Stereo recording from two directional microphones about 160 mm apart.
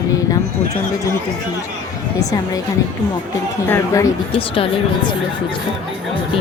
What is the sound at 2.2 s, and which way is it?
Speech, 20° left (ahead or behind).